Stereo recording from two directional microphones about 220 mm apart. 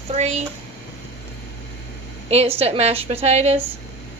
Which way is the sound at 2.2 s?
30° right (ahead or behind).